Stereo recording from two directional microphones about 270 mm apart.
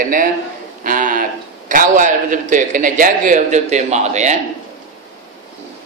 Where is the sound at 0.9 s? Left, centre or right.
Right.